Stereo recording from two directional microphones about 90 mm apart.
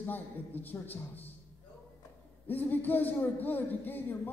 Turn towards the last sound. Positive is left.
turn(degrees=20)  # may be behind; listen again after turning